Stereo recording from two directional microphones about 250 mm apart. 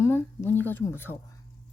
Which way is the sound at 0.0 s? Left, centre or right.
Centre.